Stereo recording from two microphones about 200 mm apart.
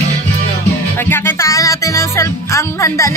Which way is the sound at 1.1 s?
10° left (ahead or behind).